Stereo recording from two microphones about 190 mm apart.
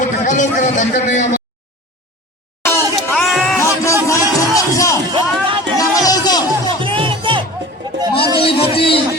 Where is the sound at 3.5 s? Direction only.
15° left (ahead or behind).